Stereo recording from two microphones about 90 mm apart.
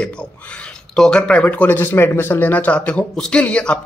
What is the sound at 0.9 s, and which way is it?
Speech, 10° left (ahead or behind).